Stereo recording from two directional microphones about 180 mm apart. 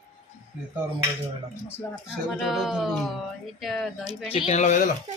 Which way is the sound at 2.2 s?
Centre (ahead or behind).